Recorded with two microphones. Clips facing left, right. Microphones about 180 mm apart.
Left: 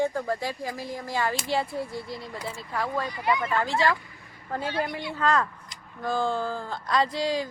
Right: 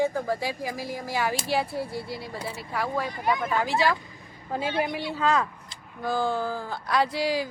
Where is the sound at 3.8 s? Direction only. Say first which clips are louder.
Even; 20° right (ahead or behind).